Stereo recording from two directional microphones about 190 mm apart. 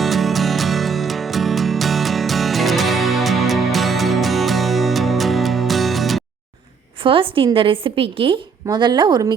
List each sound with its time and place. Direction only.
0.0 s music: centre (ahead or behind)
7.0 s a woman's voice: 25° right (ahead or behind)